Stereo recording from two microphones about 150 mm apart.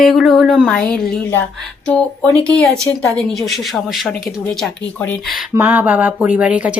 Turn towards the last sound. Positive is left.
turn(degrees=-10)  # may be behind; listen again after turning